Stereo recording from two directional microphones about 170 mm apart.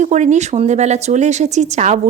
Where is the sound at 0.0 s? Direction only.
45° right (ahead or behind).